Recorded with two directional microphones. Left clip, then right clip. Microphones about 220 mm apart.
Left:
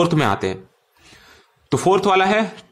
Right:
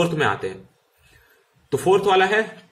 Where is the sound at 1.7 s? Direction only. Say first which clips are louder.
Left 1 dB; 45° left (ahead or behind).